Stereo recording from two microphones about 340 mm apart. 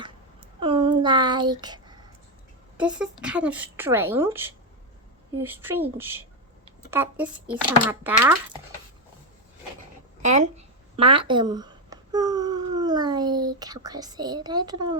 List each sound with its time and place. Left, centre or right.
0.0 s a sound: centre
2.7 s speech: centre
10.2 s speech: right
10.9 s babbling: centre